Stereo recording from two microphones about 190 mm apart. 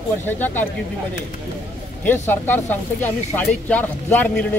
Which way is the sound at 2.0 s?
10° left (ahead or behind).